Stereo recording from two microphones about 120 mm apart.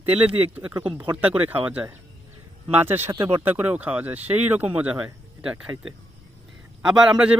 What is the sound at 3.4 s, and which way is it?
Speech, 15° right (ahead or behind).